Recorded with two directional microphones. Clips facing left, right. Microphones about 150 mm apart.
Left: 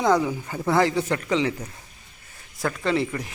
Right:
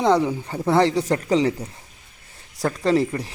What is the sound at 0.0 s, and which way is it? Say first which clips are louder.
Speech: right 2 dB; 25° right (ahead or behind).